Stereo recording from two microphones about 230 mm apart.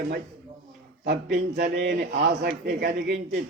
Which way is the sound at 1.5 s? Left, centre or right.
Right.